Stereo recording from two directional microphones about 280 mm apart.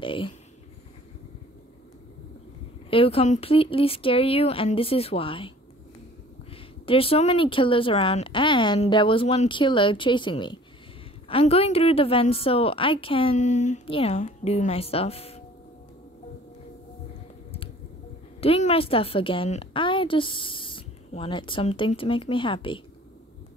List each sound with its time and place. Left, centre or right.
0.0 s speech: centre
2.9 s a woman's voice: centre
6.5 s a woman's voice: centre
18.4 s a woman's voice: left